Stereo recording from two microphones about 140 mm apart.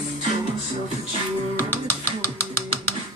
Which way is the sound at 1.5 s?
15° left (ahead or behind).